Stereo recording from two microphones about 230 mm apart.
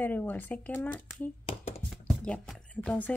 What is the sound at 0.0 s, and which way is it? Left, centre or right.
Speech, centre.